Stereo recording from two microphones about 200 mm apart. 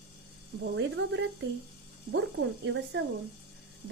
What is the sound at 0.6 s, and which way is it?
A woman's voice, 65° right (ahead or behind).